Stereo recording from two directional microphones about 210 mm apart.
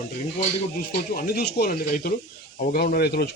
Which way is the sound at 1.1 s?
45° left (ahead or behind).